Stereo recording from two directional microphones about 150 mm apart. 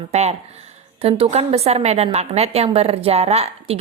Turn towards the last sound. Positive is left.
turn(degrees=-40)  # may be behind; listen again after turning